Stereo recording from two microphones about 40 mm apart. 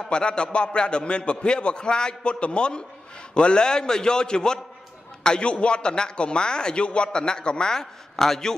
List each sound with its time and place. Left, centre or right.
0.0 s a man's voice: left